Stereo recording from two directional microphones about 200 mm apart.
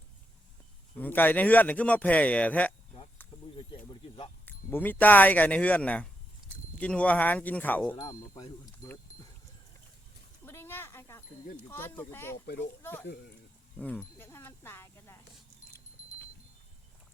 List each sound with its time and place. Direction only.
0.9 s speech: 10° left (ahead or behind)
4.4 s speech: 10° left (ahead or behind)
7.9 s speech: 20° left (ahead or behind)
10.4 s a sound: 10° left (ahead or behind)
11.7 s speech: 10° left (ahead or behind)
13.7 s a sound: 5° left (ahead or behind)